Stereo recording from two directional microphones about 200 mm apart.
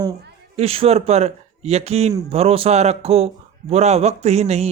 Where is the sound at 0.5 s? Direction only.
30° right (ahead or behind).